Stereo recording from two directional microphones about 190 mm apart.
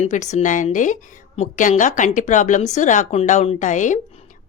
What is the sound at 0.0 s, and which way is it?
Speech, 40° left (ahead or behind).